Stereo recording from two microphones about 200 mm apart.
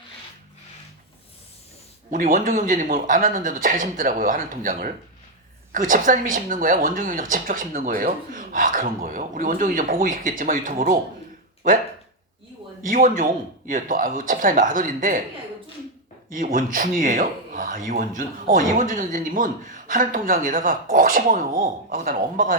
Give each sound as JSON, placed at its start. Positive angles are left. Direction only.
{"t": 2.0, "sound": "speech", "side_deg": -40}
{"t": 12.8, "sound": "speech", "side_deg": -40}
{"t": 16.3, "sound": "speech", "side_deg": -40}